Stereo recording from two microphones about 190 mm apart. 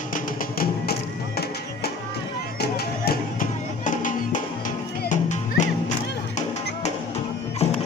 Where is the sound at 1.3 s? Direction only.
55° left (ahead or behind); by 5.9 s 40° left (ahead or behind).